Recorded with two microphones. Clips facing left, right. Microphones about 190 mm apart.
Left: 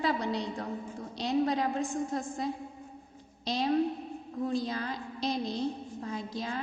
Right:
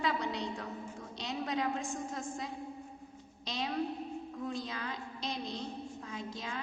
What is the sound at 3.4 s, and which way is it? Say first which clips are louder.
A woman's voice: left 8 dB; 40° left (ahead or behind).